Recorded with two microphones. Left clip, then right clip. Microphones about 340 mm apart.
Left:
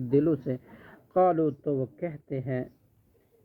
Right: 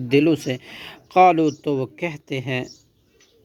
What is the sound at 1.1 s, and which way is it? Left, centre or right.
Speech, right.